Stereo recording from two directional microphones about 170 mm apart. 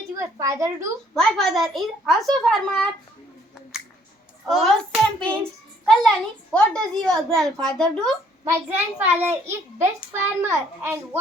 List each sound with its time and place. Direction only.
0.2 s a woman's voice: 20° right (ahead or behind)
1.1 s a woman's voice: centre (ahead or behind)
4.4 s a woman's voice: centre (ahead or behind)
8.4 s a child's voice: 10° right (ahead or behind)